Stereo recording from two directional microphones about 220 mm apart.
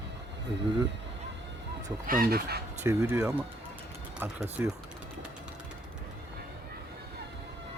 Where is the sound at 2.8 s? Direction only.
10° right (ahead or behind).